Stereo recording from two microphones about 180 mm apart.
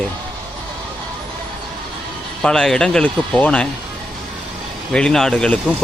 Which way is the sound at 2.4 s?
5° left (ahead or behind).